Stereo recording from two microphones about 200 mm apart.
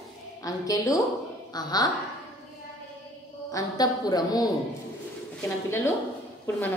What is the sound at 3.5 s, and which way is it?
Speech, 20° left (ahead or behind).